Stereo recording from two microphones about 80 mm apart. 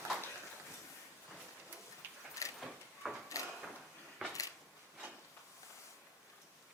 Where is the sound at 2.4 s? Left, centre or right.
Left.